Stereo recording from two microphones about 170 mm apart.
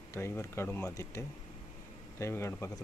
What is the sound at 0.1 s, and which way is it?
Speech, 15° left (ahead or behind).